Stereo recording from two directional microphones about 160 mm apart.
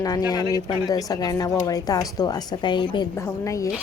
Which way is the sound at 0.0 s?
25° left (ahead or behind).